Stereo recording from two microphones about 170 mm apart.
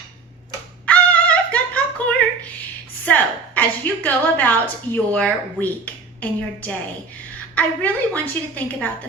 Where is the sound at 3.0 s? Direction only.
10° left (ahead or behind).